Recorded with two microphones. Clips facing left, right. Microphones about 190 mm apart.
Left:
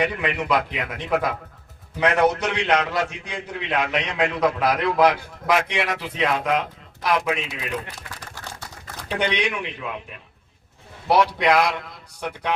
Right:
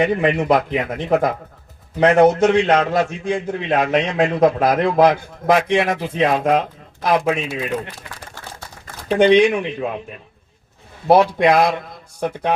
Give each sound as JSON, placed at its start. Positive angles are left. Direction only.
{"t": 0.0, "sound": "a man's voice", "side_deg": -45}
{"t": 9.0, "sound": "a man's voice", "side_deg": -50}
{"t": 11.1, "sound": "a man's voice", "side_deg": -50}